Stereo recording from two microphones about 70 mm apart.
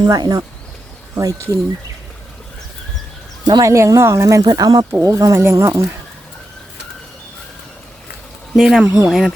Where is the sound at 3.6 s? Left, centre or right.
Right.